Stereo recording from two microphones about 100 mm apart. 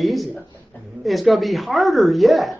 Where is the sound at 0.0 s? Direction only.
Centre (ahead or behind).